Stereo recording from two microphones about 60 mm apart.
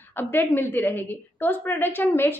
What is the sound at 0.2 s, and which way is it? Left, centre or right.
A woman's voice, left.